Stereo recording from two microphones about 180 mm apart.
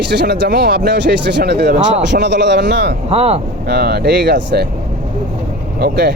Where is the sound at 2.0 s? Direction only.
75° right (ahead or behind).